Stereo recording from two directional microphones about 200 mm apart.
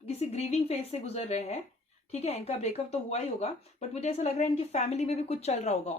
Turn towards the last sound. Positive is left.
turn(degrees=35)  # may be behind; listen again after turning